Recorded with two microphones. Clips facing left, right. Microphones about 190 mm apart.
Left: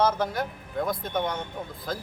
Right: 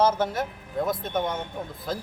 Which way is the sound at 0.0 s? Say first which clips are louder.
Right 2 dB; 5° right (ahead or behind).